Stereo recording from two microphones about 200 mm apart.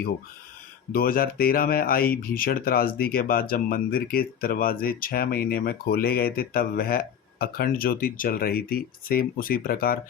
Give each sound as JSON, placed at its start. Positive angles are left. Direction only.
{"t": 0.9, "sound": "speech", "side_deg": 45}